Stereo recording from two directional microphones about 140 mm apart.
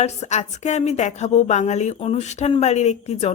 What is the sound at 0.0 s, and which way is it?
Speech, 55° left (ahead or behind).